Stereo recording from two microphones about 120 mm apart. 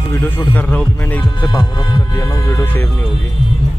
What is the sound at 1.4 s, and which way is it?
Speech, 35° left (ahead or behind).